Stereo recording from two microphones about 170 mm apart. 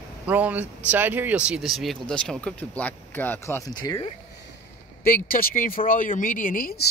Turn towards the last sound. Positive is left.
turn(degrees=55)  # may be behind; listen again after turning